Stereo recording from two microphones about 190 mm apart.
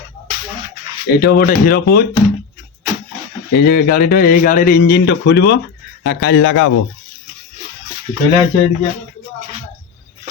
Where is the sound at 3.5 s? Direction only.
55° left (ahead or behind); by 6.7 s 90° left.